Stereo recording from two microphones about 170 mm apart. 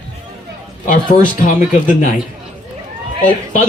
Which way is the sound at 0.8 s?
50° left (ahead or behind).